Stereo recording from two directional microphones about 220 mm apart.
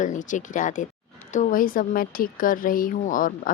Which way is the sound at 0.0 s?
35° left (ahead or behind).